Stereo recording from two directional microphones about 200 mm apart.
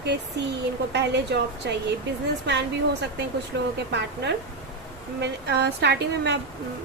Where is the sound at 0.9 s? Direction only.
60° right (ahead or behind).